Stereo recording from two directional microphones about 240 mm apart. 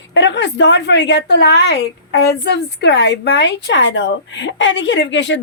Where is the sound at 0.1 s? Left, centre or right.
Left.